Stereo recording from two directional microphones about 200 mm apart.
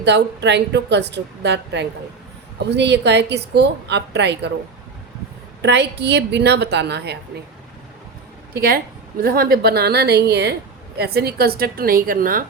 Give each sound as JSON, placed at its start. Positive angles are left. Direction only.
{"t": 0.0, "sound": "a woman's voice", "side_deg": -60}
{"t": 5.6, "sound": "a woman's voice", "side_deg": -60}
{"t": 8.5, "sound": "a woman's voice", "side_deg": -50}